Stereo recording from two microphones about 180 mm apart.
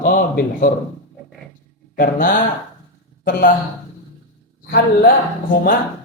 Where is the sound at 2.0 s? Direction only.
50° left (ahead or behind).